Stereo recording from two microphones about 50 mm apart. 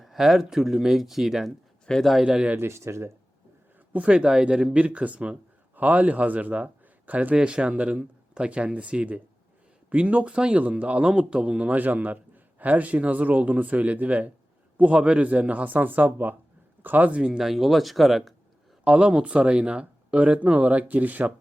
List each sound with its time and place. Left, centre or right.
0.0 s speech: centre
1.9 s speech: centre
2.2 s speech: centre
2.6 s speech: right
3.9 s a man's voice: right
7.3 s a man's voice: centre
17.2 s speech: centre
17.5 s speech: centre
18.9 s speech: right